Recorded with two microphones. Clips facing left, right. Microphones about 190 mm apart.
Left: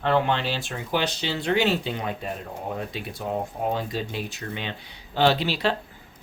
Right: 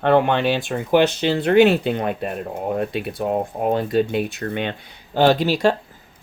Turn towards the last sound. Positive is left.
turn(degrees=-45)  # may be behind; listen again after turning